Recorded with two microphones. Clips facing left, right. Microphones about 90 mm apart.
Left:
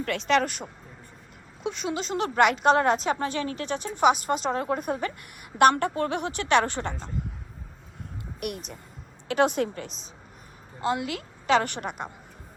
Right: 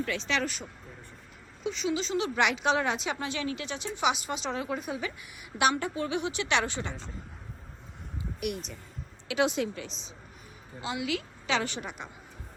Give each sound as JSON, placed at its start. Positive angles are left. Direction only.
{"t": 0.0, "sound": "a woman's voice", "side_deg": 60}
{"t": 8.4, "sound": "speech", "side_deg": 0}
{"t": 9.2, "sound": "a woman's voice", "side_deg": 50}